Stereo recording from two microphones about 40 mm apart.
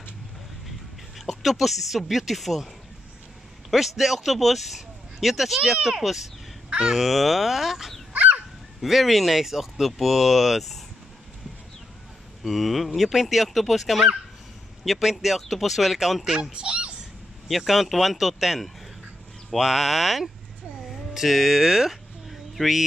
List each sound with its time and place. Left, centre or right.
1.2 s speech: centre
3.7 s a child's voice: centre
8.1 s goose: right
8.8 s speech: centre
12.4 s speech: centre
16.5 s speech: right
17.5 s speech: centre
20.9 s a sound: centre